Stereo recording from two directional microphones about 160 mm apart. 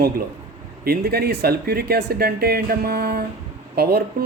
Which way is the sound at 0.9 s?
80° right.